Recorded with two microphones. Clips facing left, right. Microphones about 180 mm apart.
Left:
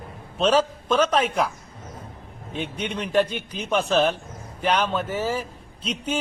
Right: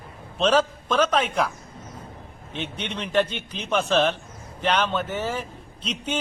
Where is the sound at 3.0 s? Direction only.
5° left (ahead or behind).